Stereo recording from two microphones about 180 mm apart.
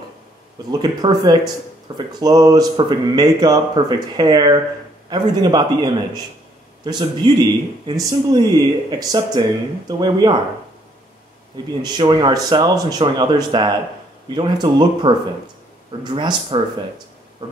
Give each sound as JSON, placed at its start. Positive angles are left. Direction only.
{"t": 0.7, "sound": "speech", "side_deg": -25}
{"t": 11.5, "sound": "speech", "side_deg": -20}